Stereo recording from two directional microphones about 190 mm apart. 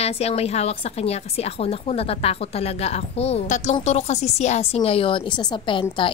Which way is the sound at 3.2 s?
35° left (ahead or behind).